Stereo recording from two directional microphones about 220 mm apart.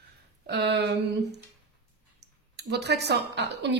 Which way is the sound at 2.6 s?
50° right (ahead or behind).